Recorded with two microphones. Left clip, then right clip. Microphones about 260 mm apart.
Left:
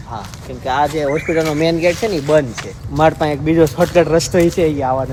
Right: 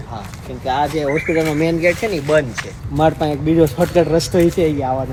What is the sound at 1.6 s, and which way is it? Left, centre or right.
Speech, left.